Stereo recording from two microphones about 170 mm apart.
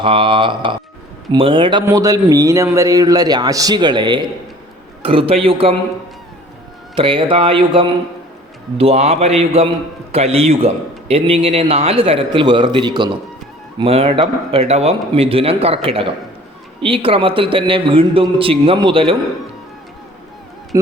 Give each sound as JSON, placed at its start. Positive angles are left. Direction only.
{"t": 0.0, "sound": "a man's voice", "side_deg": -30}
{"t": 6.9, "sound": "speech", "side_deg": -30}
{"t": 20.7, "sound": "speech", "side_deg": -20}